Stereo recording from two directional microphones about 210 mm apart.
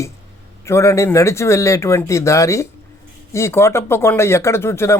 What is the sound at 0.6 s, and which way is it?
Speech, 15° left (ahead or behind).